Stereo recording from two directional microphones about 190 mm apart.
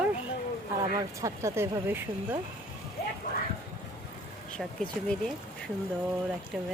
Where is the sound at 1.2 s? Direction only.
15° right (ahead or behind).